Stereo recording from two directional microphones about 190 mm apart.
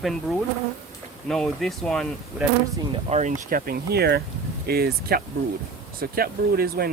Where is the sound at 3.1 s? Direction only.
45° right (ahead or behind).